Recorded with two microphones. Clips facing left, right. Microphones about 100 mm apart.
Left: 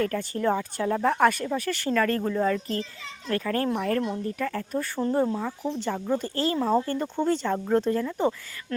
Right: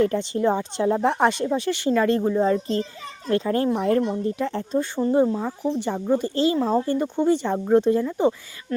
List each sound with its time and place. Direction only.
0.0 s speech: 20° right (ahead or behind)
4.9 s speech: 5° right (ahead or behind)